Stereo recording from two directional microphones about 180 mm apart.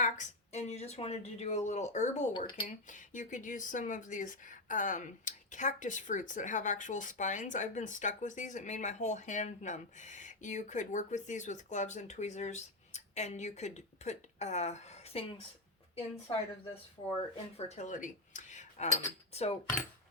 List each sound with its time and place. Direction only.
0.0 s speech: 40° left (ahead or behind)
2.3 s speech: 25° left (ahead or behind)
2.6 s speech: 45° left (ahead or behind)
16.3 s speech: 30° left (ahead or behind)
17.6 s speech: 40° left (ahead or behind)